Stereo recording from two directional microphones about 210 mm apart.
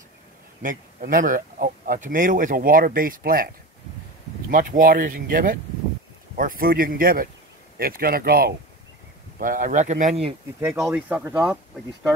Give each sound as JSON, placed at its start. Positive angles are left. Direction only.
{"t": 0.6, "sound": "speech", "side_deg": -40}
{"t": 4.5, "sound": "speech", "side_deg": -40}
{"t": 10.6, "sound": "speech", "side_deg": -10}